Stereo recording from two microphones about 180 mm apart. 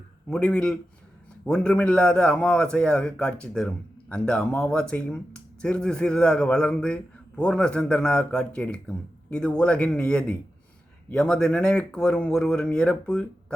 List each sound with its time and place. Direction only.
0.3 s a man's voice: 5° left (ahead or behind)